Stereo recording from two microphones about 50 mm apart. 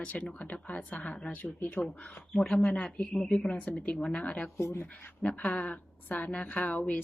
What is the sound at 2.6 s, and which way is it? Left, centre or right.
Speech, left.